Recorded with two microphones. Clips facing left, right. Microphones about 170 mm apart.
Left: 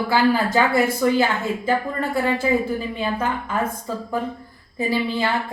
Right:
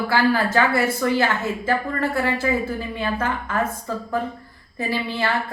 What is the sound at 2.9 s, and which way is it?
Speech, 15° left (ahead or behind).